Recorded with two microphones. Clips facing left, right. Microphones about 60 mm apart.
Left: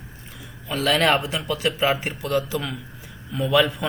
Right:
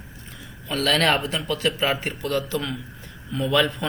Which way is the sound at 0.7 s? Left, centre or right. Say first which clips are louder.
Left 1 dB; centre.